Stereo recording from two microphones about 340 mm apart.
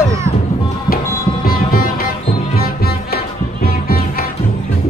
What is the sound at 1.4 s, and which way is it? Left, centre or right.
Music, left.